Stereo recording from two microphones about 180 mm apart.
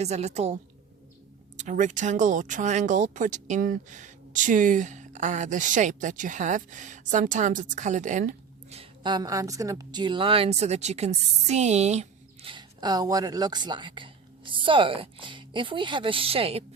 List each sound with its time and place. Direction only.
0.0 s a woman's voice: 35° right (ahead or behind)
1.5 s speech: 45° right (ahead or behind)
8.8 s a woman's voice: 25° right (ahead or behind)